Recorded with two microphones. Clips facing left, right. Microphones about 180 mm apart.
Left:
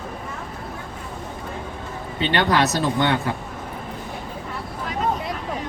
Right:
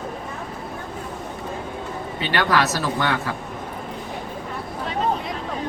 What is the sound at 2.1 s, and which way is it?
Speech, 25° left (ahead or behind).